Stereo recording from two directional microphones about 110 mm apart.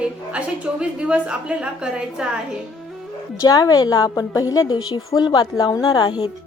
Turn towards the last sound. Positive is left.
turn(degrees=40)  # may be behind; listen again after turning